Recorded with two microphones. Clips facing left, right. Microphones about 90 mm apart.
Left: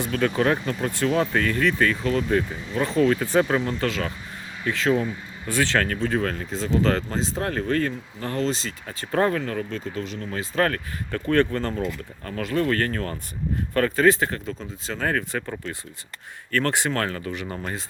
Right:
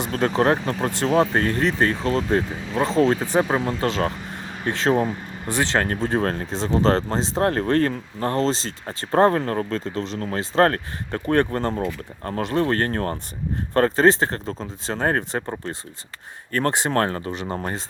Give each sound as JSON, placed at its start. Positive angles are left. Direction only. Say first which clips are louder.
{"t": 0.1, "sound": "speech", "louder": "right 3 dB", "side_deg": -35}
{"t": 4.9, "sound": "speech", "louder": "right 3 dB", "side_deg": -45}
{"t": 5.5, "sound": "speech", "louder": "right 1 dB", "side_deg": -20}
{"t": 5.9, "sound": "speech", "louder": "right 2 dB", "side_deg": -35}
{"t": 10.2, "sound": "speech", "louder": "right 4 dB", "side_deg": -45}
{"t": 10.5, "sound": "speech", "louder": "right 5 dB", "side_deg": -35}
{"t": 16.9, "sound": "speech", "louder": "right 4 dB", "side_deg": -35}